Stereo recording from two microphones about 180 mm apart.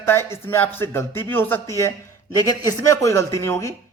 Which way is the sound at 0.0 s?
15° left (ahead or behind).